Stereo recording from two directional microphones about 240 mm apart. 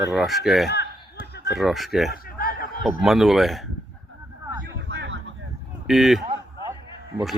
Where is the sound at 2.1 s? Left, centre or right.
Left.